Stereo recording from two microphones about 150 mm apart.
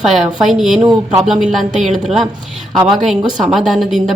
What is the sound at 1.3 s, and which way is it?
A woman's voice, centre (ahead or behind).